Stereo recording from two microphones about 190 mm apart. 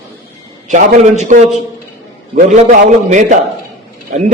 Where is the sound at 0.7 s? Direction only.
40° right (ahead or behind).